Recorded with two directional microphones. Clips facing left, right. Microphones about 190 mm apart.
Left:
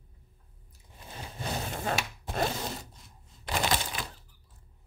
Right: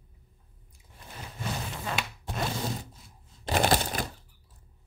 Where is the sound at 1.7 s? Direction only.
45° left (ahead or behind).